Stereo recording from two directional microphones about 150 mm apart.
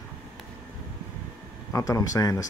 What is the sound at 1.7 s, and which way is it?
Speech, 20° left (ahead or behind).